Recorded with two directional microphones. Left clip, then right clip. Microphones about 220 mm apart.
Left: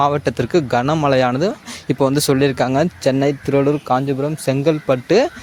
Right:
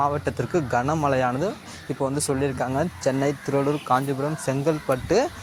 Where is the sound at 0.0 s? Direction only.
50° left (ahead or behind).